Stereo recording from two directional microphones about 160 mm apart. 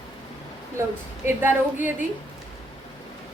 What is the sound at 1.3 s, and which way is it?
Speech, 10° right (ahead or behind).